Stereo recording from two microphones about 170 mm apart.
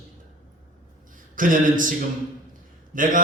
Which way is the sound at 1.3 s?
50° right (ahead or behind).